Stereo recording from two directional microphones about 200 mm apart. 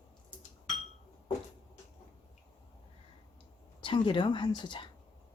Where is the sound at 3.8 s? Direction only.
25° left (ahead or behind).